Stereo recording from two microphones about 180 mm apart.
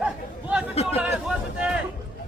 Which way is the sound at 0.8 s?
35° left (ahead or behind).